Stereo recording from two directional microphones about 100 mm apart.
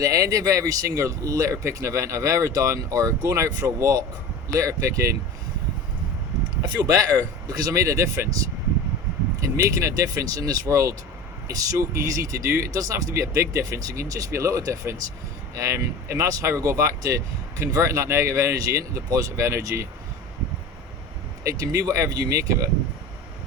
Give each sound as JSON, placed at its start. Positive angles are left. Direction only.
{"t": 0.0, "sound": "speech", "side_deg": -35}
{"t": 6.6, "sound": "speech", "side_deg": -35}
{"t": 9.4, "sound": "speech", "side_deg": -35}
{"t": 21.4, "sound": "speech", "side_deg": -35}